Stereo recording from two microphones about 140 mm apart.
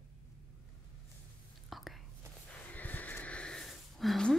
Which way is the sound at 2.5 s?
10° left (ahead or behind).